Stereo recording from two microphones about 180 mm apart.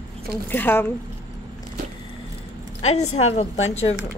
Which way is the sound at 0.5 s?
10° left (ahead or behind).